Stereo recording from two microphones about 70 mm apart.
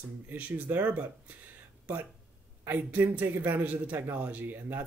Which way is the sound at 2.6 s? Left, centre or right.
Right.